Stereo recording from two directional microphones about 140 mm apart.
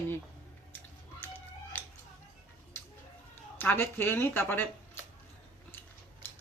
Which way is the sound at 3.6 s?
15° left (ahead or behind).